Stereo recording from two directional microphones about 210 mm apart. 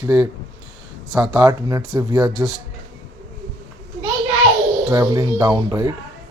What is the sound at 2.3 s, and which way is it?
Speech, 5° right (ahead or behind).